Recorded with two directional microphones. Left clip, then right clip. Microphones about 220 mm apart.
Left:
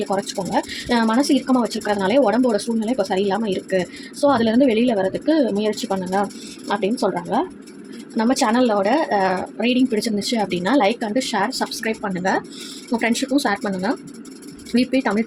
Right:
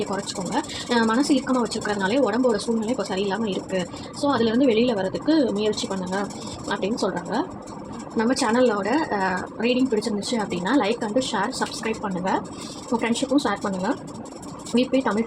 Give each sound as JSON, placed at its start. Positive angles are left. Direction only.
{"t": 0.1, "sound": "speech", "side_deg": 40}